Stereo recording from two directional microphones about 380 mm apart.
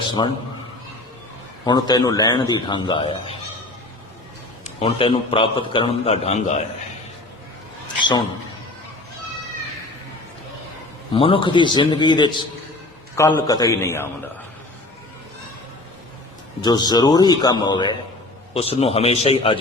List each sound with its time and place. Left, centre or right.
0.2 s a man's voice: centre
1.6 s a man's voice: centre
4.6 s a man's voice: centre
7.9 s a sound: centre
11.1 s a man's voice: centre
16.6 s a man's voice: centre